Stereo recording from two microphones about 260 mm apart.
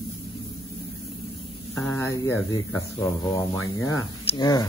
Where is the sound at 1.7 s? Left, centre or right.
Centre.